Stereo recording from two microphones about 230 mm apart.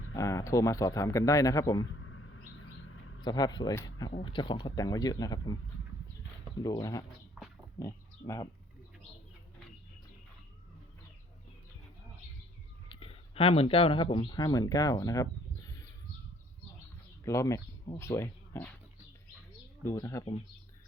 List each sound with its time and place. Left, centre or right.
0.1 s a man's voice: centre
3.2 s a man's voice: centre
6.6 s a man's voice: centre
12.9 s speech: left
17.2 s speech: centre
19.8 s a man's voice: centre